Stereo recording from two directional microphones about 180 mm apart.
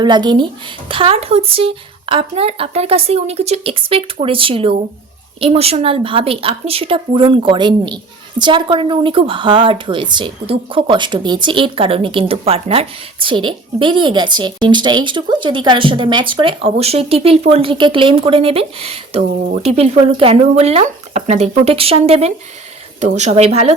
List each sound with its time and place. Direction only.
0.0 s speech: 25° right (ahead or behind)